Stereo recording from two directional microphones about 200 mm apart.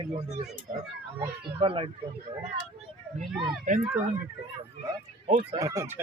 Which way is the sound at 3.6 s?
40° right (ahead or behind).